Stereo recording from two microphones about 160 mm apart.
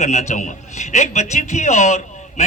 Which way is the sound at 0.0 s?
45° left (ahead or behind).